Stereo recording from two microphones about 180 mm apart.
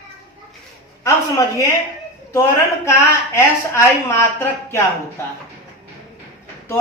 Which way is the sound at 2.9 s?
15° left (ahead or behind).